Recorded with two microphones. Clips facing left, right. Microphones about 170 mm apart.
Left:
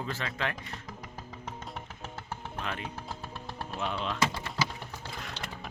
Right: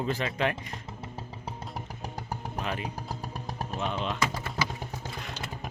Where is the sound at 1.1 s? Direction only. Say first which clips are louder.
Right 2 dB; 35° right (ahead or behind).